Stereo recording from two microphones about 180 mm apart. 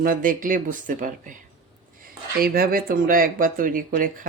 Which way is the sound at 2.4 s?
55° right (ahead or behind).